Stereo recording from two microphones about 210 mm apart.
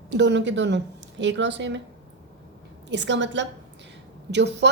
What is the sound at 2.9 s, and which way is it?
A woman's voice, 60° right (ahead or behind).